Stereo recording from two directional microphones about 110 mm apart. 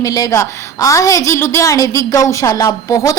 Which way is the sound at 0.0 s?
30° left (ahead or behind).